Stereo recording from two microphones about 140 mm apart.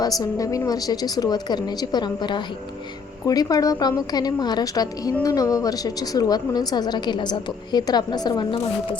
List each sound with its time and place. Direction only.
0.0 s a woman's voice: 25° left (ahead or behind)